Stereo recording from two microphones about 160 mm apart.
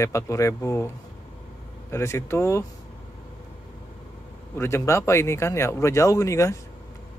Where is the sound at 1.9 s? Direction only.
15° left (ahead or behind).